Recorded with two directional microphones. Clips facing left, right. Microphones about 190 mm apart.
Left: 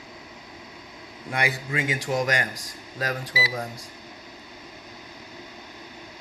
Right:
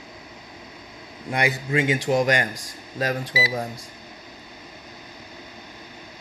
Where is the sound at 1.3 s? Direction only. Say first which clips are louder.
Right 5 dB; 20° right (ahead or behind).